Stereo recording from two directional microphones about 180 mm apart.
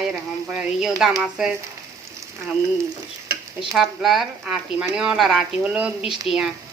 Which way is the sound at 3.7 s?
Centre (ahead or behind).